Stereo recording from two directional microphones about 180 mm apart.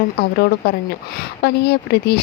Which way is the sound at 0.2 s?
65° left (ahead or behind).